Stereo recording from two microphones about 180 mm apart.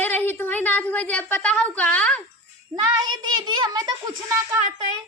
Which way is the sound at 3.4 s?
25° right (ahead or behind).